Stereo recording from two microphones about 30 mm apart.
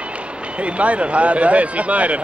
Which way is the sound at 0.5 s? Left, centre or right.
Right.